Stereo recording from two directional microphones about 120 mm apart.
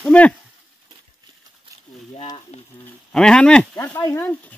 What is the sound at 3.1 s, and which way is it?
Speech, 5° left (ahead or behind).